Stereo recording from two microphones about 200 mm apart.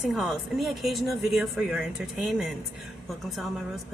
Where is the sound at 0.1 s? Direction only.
Centre (ahead or behind).